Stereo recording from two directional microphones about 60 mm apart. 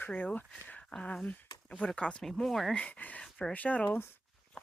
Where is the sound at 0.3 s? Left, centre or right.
Centre.